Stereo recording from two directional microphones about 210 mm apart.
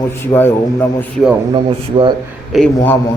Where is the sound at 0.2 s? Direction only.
10° left (ahead or behind).